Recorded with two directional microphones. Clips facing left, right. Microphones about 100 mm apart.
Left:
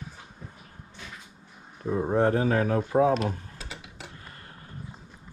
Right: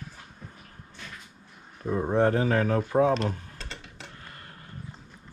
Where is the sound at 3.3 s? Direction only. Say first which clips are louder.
Even; 5° left (ahead or behind).